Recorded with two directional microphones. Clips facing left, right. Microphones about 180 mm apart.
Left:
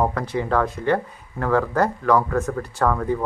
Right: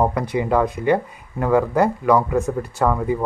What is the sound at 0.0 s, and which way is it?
Speech, 15° right (ahead or behind).